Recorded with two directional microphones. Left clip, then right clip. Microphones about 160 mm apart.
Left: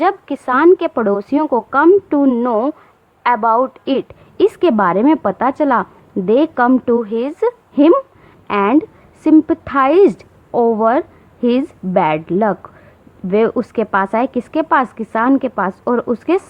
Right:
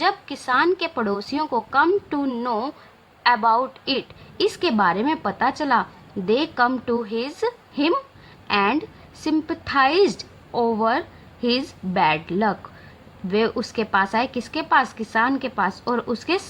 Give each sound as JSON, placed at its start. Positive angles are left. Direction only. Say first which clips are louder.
{"t": 0.0, "sound": "a woman's voice", "louder": "left 6 dB", "side_deg": 45}
{"t": 16.1, "sound": "a woman's voice", "louder": "left 7 dB", "side_deg": 55}